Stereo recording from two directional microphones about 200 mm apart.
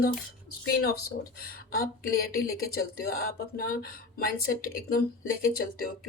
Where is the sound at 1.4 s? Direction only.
50° left (ahead or behind).